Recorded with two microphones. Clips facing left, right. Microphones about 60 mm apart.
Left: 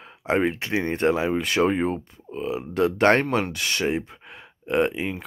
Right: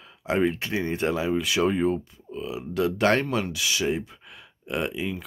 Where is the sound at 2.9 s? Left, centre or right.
Left.